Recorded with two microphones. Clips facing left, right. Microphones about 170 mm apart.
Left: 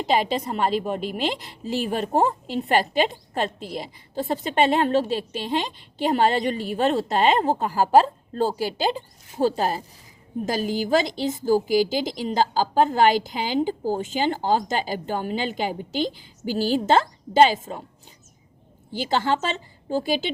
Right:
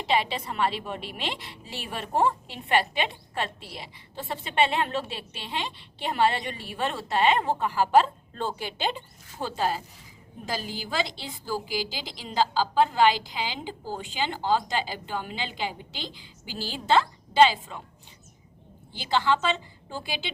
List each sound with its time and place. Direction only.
0.0 s a woman's voice: 40° left (ahead or behind)
18.9 s a woman's voice: 45° left (ahead or behind)